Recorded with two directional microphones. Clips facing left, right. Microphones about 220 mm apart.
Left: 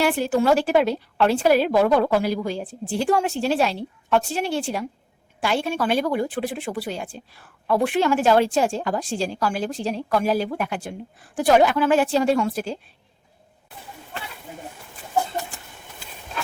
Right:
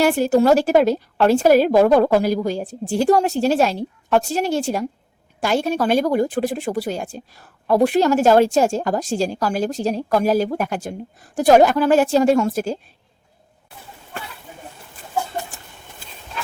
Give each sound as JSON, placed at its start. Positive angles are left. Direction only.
{"t": 0.0, "sound": "speech", "side_deg": -45}